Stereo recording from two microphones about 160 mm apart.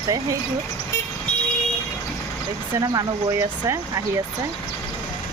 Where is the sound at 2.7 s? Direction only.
20° right (ahead or behind).